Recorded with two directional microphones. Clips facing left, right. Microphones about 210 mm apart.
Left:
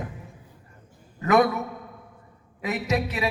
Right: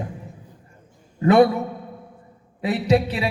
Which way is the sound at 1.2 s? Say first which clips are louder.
Right 5 dB; 30° right (ahead or behind).